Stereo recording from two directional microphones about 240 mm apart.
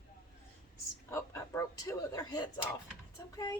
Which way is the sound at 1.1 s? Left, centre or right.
Centre.